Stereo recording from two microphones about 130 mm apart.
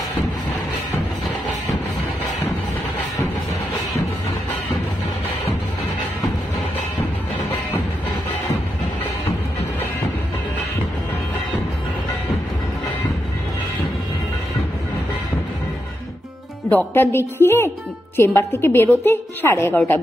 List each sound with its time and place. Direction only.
16.6 s a woman's voice: 15° left (ahead or behind)